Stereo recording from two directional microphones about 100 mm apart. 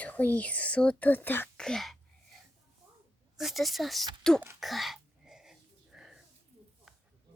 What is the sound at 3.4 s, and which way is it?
Speech, centre (ahead or behind).